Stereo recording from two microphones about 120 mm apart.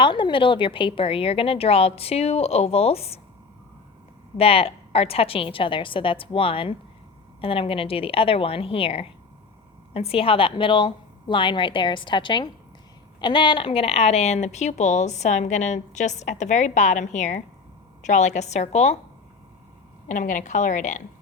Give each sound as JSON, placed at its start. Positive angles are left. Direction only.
{"t": 0.0, "sound": "a woman's voice", "side_deg": 45}
{"t": 4.4, "sound": "a woman's voice", "side_deg": 55}
{"t": 20.1, "sound": "a woman's voice", "side_deg": 90}